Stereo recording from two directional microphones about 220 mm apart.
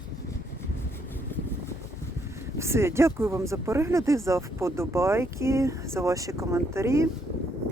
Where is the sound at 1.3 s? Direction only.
10° left (ahead or behind).